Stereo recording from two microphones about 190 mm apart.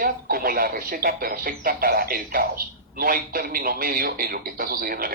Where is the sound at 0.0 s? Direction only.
50° right (ahead or behind).